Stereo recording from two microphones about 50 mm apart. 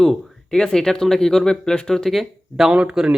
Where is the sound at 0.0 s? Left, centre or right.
Centre.